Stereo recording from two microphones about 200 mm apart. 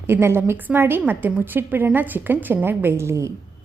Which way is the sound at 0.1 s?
10° right (ahead or behind).